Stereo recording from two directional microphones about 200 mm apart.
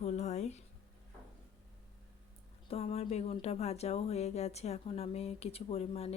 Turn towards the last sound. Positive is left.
turn(degrees=30)  # may be behind; listen again after turning